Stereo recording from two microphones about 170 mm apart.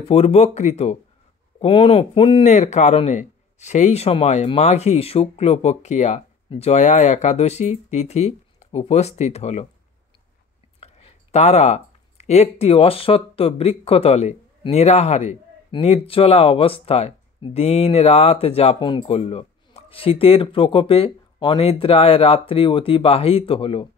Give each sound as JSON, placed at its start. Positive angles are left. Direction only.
{"t": 0.1, "sound": "speech", "side_deg": 35}
{"t": 1.6, "sound": "speech", "side_deg": 30}
{"t": 2.4, "sound": "speech", "side_deg": 40}
{"t": 10.8, "sound": "speech", "side_deg": 35}